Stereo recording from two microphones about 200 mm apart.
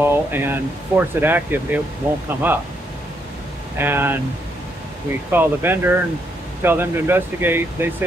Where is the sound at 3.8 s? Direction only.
10° right (ahead or behind).